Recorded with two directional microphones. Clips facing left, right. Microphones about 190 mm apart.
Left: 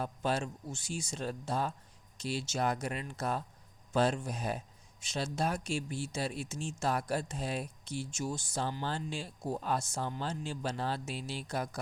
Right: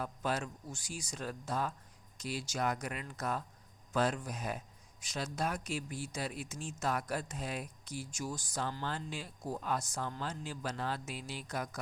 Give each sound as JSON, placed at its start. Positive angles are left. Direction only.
{"t": 0.0, "sound": "speech", "side_deg": 30}